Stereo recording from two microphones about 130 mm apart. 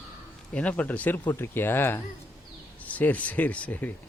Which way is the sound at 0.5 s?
10° left (ahead or behind).